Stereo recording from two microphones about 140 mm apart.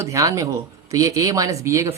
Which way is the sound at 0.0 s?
20° right (ahead or behind).